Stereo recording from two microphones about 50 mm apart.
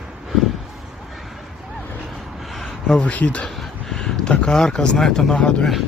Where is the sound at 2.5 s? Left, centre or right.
Centre.